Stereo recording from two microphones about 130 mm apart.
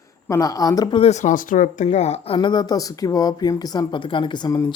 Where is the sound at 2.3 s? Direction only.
35° left (ahead or behind).